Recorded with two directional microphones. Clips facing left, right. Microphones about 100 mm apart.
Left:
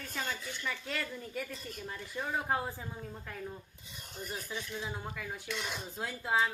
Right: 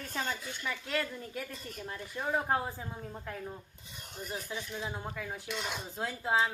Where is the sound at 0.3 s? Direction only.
10° right (ahead or behind).